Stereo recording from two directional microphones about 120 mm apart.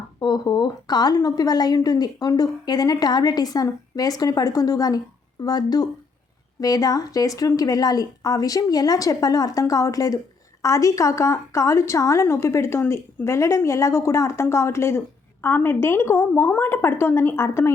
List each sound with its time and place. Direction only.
0.2 s a woman's voice: 35° left (ahead or behind)